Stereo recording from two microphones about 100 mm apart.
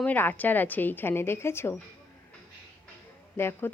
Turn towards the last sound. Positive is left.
turn(degrees=25)  # may be behind; listen again after turning